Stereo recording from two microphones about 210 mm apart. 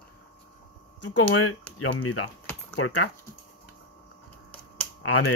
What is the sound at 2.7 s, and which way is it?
Speech, 70° left (ahead or behind).